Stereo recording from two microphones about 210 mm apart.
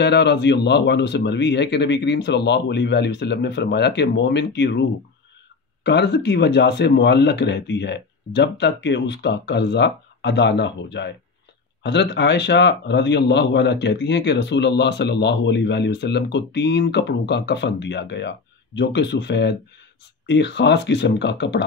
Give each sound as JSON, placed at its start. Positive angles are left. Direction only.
{"t": 0.0, "sound": "a man's voice", "side_deg": 55}
{"t": 5.9, "sound": "a man's voice", "side_deg": 55}